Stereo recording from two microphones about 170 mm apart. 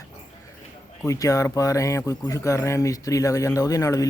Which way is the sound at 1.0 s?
20° left (ahead or behind).